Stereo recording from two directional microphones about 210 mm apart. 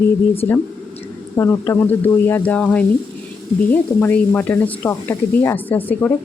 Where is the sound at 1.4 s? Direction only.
15° left (ahead or behind).